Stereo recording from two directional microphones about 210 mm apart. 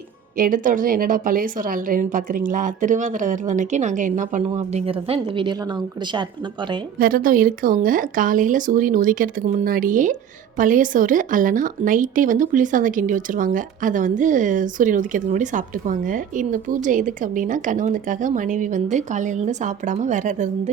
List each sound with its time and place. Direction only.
0.3 s speech: 40° right (ahead or behind); by 5.5 s 25° right (ahead or behind)
7.0 s speech: 40° right (ahead or behind)